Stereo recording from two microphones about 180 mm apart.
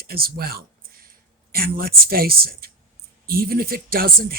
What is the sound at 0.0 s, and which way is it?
Speech, 55° right (ahead or behind).